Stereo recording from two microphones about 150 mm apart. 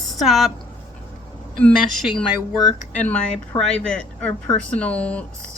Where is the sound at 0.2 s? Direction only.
Centre (ahead or behind).